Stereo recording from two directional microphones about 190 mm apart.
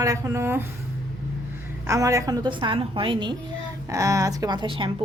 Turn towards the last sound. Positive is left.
turn(degrees=-25)  # may be behind; listen again after turning